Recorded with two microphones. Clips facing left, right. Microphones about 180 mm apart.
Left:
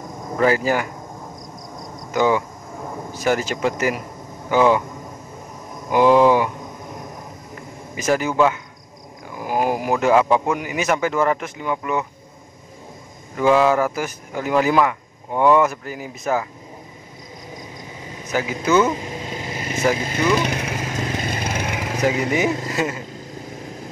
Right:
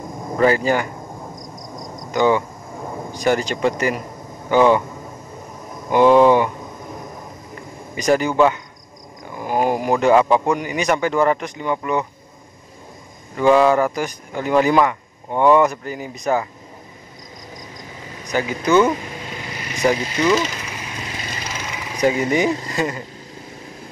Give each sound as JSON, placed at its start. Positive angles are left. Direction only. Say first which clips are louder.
{"t": 0.4, "sound": "speech", "louder": "right 2 dB", "side_deg": 5}
{"t": 2.0, "sound": "speech", "louder": "right 2 dB", "side_deg": 5}
{"t": 5.9, "sound": "speech", "louder": "right 2 dB", "side_deg": 5}
{"t": 7.9, "sound": "speech", "louder": "right 3 dB", "side_deg": 5}
{"t": 13.4, "sound": "speech", "louder": "right 2 dB", "side_deg": 5}
{"t": 18.2, "sound": "speech", "louder": "right 1 dB", "side_deg": 5}
{"t": 19.4, "sound": "vehicle", "louder": "left 4 dB", "side_deg": 25}
{"t": 20.3, "sound": "vehicle", "louder": "left 1 dB", "side_deg": 60}
{"t": 22.0, "sound": "speech", "louder": "right 3 dB", "side_deg": 5}